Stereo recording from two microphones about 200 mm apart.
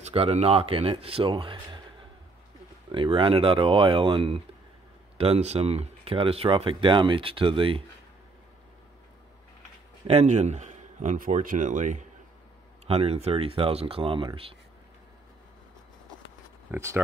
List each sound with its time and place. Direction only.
0.0 s speech: 30° right (ahead or behind)
2.9 s speech: 25° right (ahead or behind)
10.0 s speech: 35° right (ahead or behind)
16.7 s speech: 10° right (ahead or behind)